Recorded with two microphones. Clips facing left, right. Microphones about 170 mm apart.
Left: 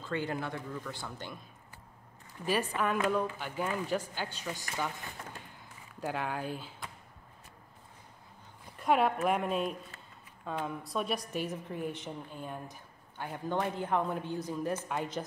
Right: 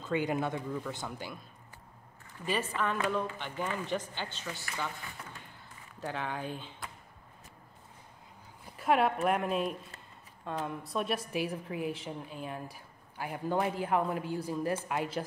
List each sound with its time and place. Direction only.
0.0 s speech: 15° right (ahead or behind)
2.4 s speech: 10° left (ahead or behind)
5.9 s speech: 10° left (ahead or behind)
8.7 s a man's voice: centre (ahead or behind)